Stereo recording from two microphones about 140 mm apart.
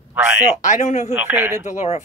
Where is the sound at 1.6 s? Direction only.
55° left (ahead or behind).